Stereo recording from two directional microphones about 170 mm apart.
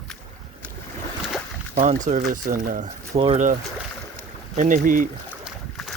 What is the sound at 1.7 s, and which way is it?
Speech, 45° right (ahead or behind).